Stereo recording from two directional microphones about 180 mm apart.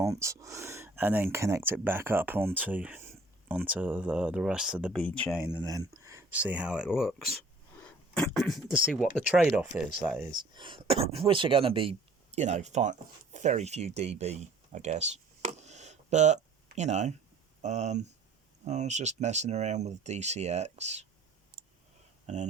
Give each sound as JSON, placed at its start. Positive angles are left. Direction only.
{"t": 0.0, "sound": "speech", "side_deg": -15}
{"t": 5.5, "sound": "speech", "side_deg": -20}
{"t": 10.3, "sound": "speech", "side_deg": -25}
{"t": 22.3, "sound": "speech", "side_deg": -40}